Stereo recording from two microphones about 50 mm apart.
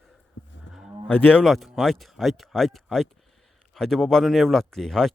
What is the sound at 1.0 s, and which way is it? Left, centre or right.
Speech, left.